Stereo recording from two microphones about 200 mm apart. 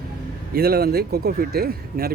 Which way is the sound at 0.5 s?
50° right (ahead or behind).